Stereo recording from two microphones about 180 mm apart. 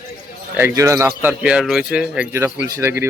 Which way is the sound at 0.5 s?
15° right (ahead or behind).